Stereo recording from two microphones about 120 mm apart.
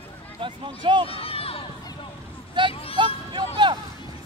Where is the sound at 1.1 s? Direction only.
50° left (ahead or behind).